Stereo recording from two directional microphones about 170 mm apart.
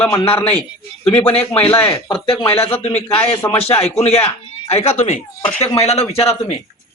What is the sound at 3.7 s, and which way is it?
Speech, 35° left (ahead or behind).